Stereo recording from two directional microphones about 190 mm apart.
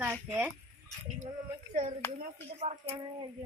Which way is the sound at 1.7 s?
40° right (ahead or behind).